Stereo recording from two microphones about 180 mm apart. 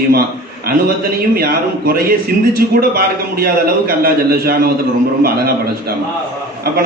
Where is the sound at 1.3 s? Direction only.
55° right (ahead or behind).